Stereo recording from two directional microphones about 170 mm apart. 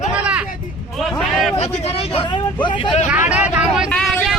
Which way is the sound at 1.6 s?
35° left (ahead or behind).